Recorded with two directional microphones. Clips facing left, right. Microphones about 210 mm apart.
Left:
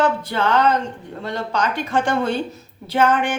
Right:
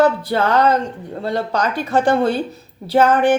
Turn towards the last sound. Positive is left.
turn(degrees=-35)  # may be behind; listen again after turning